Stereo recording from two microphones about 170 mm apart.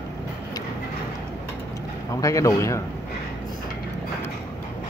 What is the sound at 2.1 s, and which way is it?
Speech, 20° left (ahead or behind).